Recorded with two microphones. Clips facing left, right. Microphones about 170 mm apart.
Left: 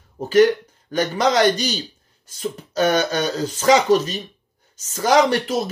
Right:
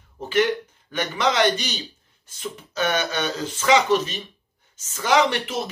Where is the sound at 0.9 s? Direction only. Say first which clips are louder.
Left 4 dB; 40° left (ahead or behind).